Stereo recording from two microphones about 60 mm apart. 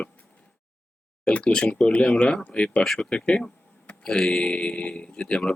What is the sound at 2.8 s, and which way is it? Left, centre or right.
Speech, centre.